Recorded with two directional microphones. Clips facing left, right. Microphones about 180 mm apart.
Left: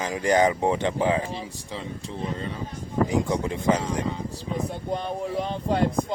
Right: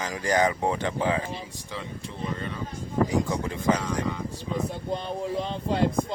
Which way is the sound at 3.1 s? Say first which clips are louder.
Left 2 dB; 20° left (ahead or behind).